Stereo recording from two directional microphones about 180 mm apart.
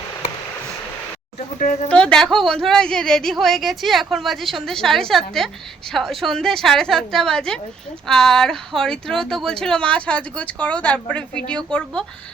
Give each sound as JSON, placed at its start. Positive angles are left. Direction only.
{"t": 1.5, "sound": "speech", "side_deg": 45}
{"t": 1.9, "sound": "speech", "side_deg": 5}